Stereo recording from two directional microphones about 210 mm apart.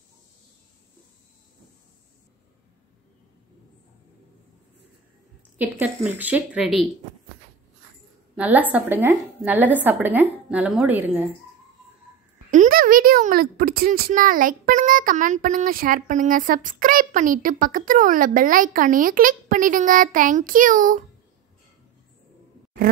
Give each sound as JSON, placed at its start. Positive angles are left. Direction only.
{"t": 5.6, "sound": "speech", "side_deg": -10}
{"t": 8.4, "sound": "speech", "side_deg": -5}
{"t": 12.4, "sound": "speech", "side_deg": -40}